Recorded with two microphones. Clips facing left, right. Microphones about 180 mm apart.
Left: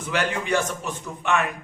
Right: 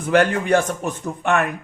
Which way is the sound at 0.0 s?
55° right (ahead or behind).